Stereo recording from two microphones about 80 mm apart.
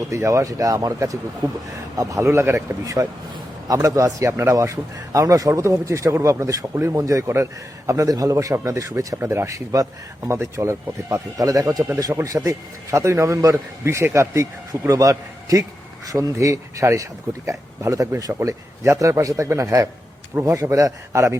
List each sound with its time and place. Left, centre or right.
0.1 s a man's voice: right
4.3 s a man's voice: right
4.5 s a man's voice: right